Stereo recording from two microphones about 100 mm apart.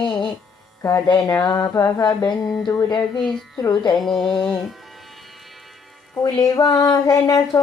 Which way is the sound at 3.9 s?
Centre (ahead or behind).